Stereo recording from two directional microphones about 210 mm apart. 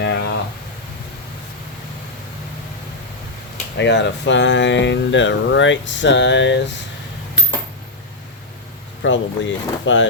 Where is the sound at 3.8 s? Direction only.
55° left (ahead or behind).